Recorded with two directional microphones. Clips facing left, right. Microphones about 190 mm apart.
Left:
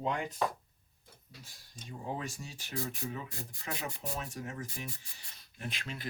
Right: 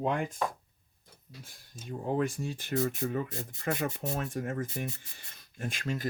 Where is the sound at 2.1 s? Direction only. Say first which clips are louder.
Right 10 dB; 55° right (ahead or behind).